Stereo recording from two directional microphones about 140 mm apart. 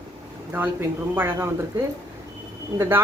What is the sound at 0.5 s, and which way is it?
Speech, 15° right (ahead or behind).